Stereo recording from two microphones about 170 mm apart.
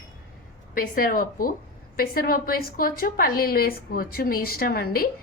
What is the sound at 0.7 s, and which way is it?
A woman's voice, 55° left (ahead or behind).